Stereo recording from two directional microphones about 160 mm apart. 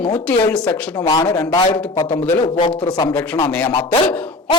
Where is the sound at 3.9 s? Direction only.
30° left (ahead or behind).